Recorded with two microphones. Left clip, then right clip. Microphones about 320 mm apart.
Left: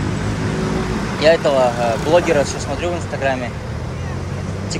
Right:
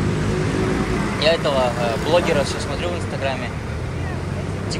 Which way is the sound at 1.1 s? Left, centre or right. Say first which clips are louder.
Left 5 dB; centre.